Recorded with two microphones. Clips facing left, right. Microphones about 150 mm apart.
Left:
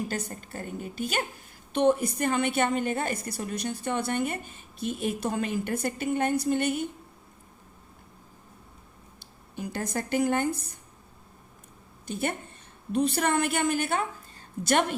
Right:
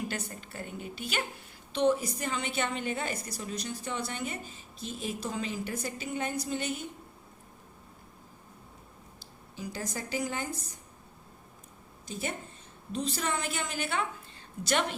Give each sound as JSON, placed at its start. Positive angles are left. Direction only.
{"t": 0.1, "sound": "a woman's voice", "side_deg": 45}
{"t": 9.6, "sound": "a woman's voice", "side_deg": 60}
{"t": 12.9, "sound": "a woman's voice", "side_deg": 60}